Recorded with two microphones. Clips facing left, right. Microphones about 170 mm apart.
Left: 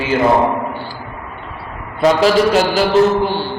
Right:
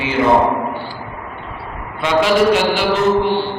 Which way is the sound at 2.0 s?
40° left (ahead or behind).